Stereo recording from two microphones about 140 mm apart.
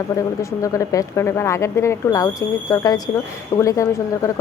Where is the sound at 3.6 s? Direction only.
20° left (ahead or behind).